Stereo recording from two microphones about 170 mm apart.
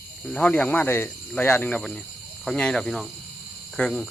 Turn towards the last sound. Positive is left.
turn(degrees=5)  # may be behind; listen again after turning